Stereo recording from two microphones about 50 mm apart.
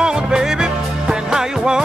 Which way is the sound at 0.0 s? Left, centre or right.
Centre.